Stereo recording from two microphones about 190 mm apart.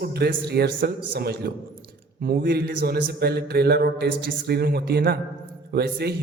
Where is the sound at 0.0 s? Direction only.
55° right (ahead or behind).